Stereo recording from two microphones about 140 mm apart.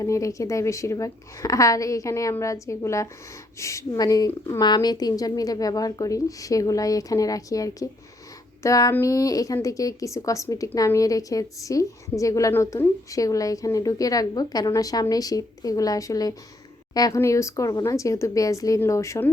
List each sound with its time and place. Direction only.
0.0 s a woman's voice: 25° left (ahead or behind)